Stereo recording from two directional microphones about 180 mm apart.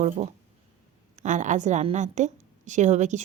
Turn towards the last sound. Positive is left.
turn(degrees=-40)  # may be behind; listen again after turning